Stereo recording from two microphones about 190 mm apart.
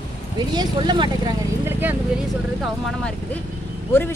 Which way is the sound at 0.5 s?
25° right (ahead or behind).